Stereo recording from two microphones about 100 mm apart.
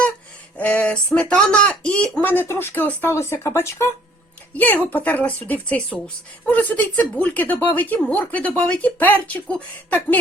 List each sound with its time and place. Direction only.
0.5 s a woman's voice: 15° left (ahead or behind)
2.3 s a woman's voice: 20° left (ahead or behind)